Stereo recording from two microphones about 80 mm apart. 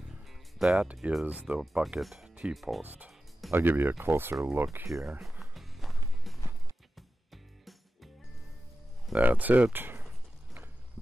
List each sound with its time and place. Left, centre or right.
0.3 s music: centre
1.2 s speech: centre
1.6 s speech: centre
2.5 s speech: centre
2.8 s speech: centre; by 5.1 s right
5.4 s music: centre
9.1 s speech: centre